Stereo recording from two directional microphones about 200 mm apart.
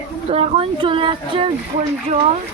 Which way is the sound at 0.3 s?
30° right (ahead or behind).